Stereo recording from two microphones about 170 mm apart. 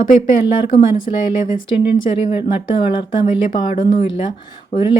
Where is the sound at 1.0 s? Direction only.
50° left (ahead or behind).